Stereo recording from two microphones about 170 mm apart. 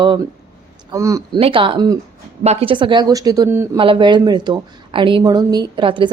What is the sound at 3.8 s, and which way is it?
Speech, 30° right (ahead or behind).